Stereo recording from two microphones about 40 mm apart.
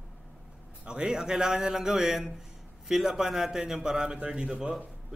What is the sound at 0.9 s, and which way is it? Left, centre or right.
A man's voice, centre.